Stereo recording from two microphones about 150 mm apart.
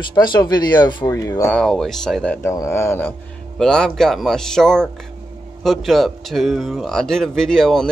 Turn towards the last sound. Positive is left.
turn(degrees=5)  # may be behind; listen again after turning